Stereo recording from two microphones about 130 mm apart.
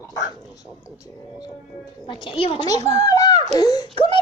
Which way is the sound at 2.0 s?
40° left (ahead or behind).